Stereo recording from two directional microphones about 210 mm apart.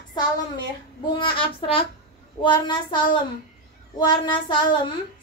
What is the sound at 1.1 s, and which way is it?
Speech, 25° left (ahead or behind).